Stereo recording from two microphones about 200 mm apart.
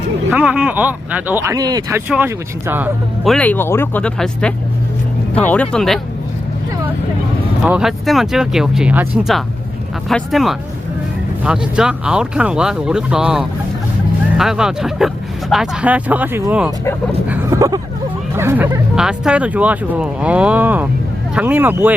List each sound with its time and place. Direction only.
0.3 s speech: 5° right (ahead or behind)
2.0 s speech: 10° right (ahead or behind)
3.3 s speech: 10° left (ahead or behind)
7.6 s speech: centre (ahead or behind)